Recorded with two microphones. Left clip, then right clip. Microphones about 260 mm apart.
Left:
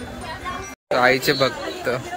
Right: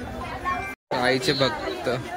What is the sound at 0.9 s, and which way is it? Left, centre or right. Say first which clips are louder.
A man's voice: left 6 dB; centre.